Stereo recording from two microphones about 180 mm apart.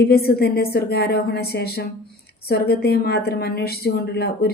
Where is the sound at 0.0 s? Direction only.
60° left (ahead or behind).